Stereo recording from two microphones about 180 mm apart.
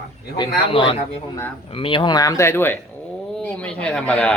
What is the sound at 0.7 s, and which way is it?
Speech, 30° left (ahead or behind).